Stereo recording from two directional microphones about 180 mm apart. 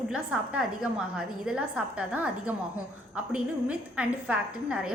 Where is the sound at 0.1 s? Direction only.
5° right (ahead or behind).